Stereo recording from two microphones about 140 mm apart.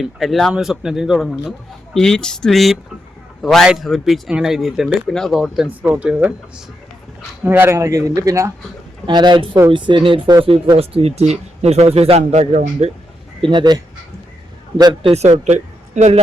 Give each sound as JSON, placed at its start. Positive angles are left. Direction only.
{"t": 0.0, "sound": "a man's voice", "side_deg": 0}
{"t": 7.4, "sound": "speech", "side_deg": -15}
{"t": 13.4, "sound": "speech", "side_deg": -35}
{"t": 15.4, "sound": "speech", "side_deg": -55}